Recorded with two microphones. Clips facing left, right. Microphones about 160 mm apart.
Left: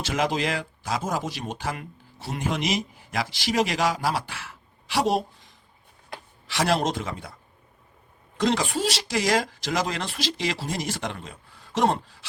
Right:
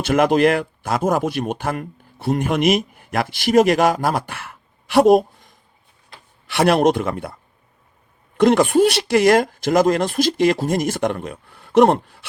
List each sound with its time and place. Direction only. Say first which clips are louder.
0.0 s speech: right 10 dB; 55° right (ahead or behind)
8.4 s speech: right 11 dB; 55° right (ahead or behind)